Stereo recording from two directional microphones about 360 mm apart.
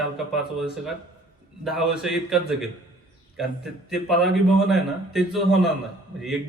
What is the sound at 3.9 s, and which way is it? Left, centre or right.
A man's voice, centre.